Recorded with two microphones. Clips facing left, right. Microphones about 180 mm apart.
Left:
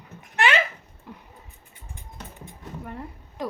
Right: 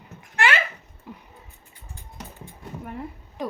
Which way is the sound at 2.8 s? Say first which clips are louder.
Right 2 dB; 5° right (ahead or behind).